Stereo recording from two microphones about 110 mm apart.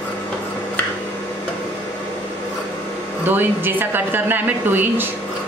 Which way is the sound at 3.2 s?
20° right (ahead or behind).